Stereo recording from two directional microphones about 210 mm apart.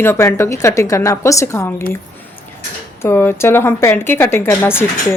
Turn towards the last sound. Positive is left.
turn(degrees=10)  # may be behind; listen again after turning